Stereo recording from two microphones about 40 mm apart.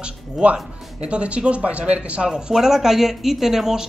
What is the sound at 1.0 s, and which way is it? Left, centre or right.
Speech, right.